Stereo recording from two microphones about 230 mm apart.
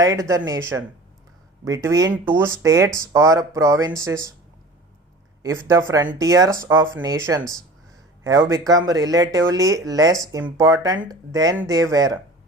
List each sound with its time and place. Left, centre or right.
0.0 s speech: centre
5.4 s speech: centre